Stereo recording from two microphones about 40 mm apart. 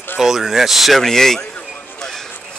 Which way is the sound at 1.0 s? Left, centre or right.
Centre.